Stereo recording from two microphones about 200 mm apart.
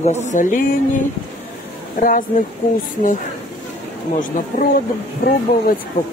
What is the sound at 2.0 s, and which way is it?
Speech, 40° left (ahead or behind).